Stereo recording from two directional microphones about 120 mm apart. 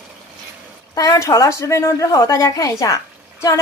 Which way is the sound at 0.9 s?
30° left (ahead or behind).